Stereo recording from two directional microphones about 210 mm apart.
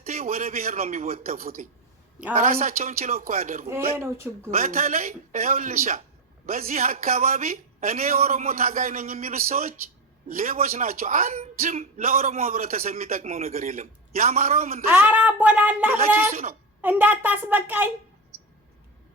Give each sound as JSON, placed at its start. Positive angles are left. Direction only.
{"t": 0.0, "sound": "speech", "side_deg": -35}
{"t": 3.9, "sound": "speech", "side_deg": -10}
{"t": 4.5, "sound": "speech", "side_deg": -40}
{"t": 14.8, "sound": "speech", "side_deg": -10}
{"t": 16.3, "sound": "speech", "side_deg": -40}
{"t": 16.8, "sound": "speech", "side_deg": -10}